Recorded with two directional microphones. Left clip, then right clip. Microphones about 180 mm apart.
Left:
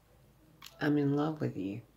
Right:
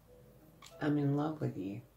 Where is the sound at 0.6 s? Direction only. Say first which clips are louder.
Left 4 dB; 40° left (ahead or behind).